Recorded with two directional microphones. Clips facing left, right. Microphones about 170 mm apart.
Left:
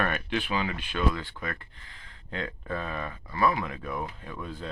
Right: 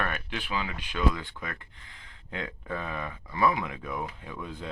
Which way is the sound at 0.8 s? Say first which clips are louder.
Even; 15° right (ahead or behind).